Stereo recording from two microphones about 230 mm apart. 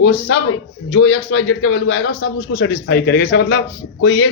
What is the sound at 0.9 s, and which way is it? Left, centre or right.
A man's voice, left.